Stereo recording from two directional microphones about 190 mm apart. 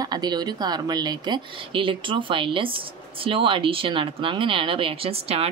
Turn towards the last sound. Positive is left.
turn(degrees=-30)  # may be behind; listen again after turning